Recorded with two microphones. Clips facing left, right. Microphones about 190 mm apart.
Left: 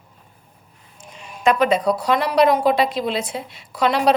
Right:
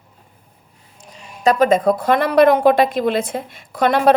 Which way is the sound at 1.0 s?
40° right (ahead or behind).